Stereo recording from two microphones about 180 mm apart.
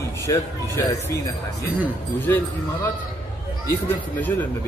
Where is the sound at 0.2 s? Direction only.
15° left (ahead or behind).